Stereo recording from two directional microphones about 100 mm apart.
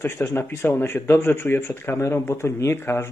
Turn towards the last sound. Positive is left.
turn(degrees=25)  # may be behind; listen again after turning